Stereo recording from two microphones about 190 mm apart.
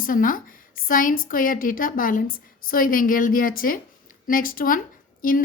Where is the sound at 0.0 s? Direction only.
45° left (ahead or behind).